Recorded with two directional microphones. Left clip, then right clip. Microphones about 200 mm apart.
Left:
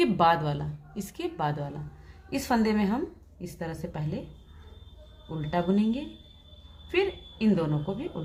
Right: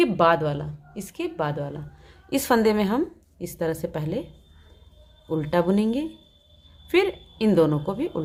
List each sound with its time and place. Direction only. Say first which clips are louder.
0.0 s a woman's voice: right 4 dB; 25° right (ahead or behind)
2.3 s a woman's voice: right 7 dB; 40° right (ahead or behind)
5.4 s a woman's voice: right 5 dB; 40° right (ahead or behind)